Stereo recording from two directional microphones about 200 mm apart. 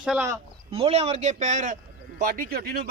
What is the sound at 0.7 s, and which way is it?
Speech, 30° right (ahead or behind).